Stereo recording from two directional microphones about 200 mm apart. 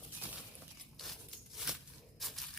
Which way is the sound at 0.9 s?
Centre (ahead or behind).